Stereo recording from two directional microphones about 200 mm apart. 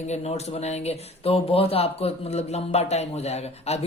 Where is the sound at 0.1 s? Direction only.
35° left (ahead or behind).